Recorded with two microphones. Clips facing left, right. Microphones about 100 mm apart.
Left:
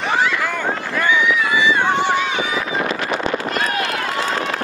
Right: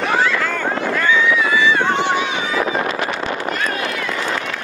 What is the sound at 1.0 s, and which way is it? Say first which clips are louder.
Run: even; 15° left (ahead or behind).